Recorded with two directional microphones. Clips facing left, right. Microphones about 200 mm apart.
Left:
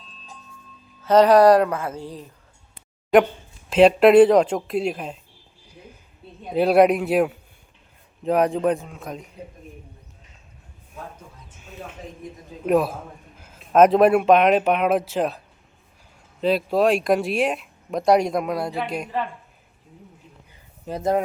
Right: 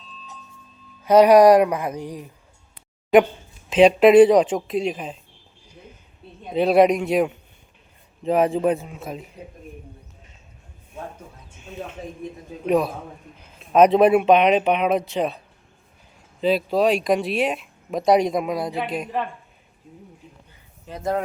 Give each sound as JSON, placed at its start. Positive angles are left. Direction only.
{"t": 1.0, "sound": "speech", "side_deg": -10}
{"t": 3.8, "sound": "speech", "side_deg": 5}
{"t": 6.5, "sound": "speech", "side_deg": 5}
{"t": 12.6, "sound": "speech", "side_deg": 5}
{"t": 16.4, "sound": "speech", "side_deg": 0}
{"t": 20.9, "sound": "speech", "side_deg": 45}